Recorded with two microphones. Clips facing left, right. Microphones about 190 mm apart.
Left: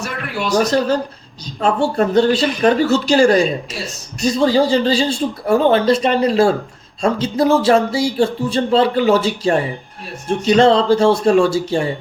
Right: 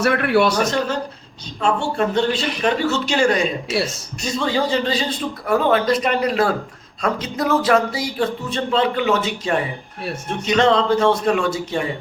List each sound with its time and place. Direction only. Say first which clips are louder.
0.1 s a man's voice: right 9 dB; 65° right (ahead or behind)
0.6 s speech: left 5 dB; 35° left (ahead or behind)